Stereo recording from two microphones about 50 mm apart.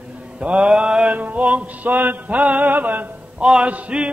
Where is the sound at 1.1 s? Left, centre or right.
Right.